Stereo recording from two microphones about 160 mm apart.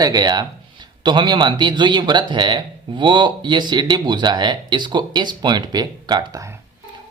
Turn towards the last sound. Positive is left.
turn(degrees=-20)  # may be behind; listen again after turning